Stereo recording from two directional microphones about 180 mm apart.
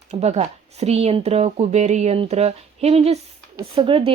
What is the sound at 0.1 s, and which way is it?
A woman's voice, 35° right (ahead or behind).